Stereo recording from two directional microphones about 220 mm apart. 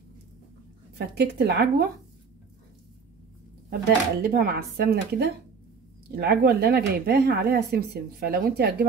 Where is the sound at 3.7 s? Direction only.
45° right (ahead or behind).